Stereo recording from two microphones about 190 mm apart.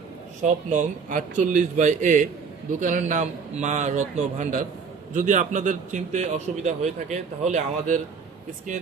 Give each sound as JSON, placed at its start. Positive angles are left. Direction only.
{"t": 0.4, "sound": "a man's voice", "side_deg": -40}